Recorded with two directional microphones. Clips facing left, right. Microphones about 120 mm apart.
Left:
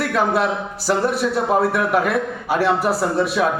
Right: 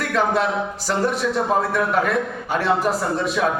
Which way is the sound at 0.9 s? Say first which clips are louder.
Left 3 dB; 10° left (ahead or behind).